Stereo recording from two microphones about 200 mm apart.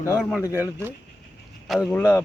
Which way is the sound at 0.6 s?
10° right (ahead or behind).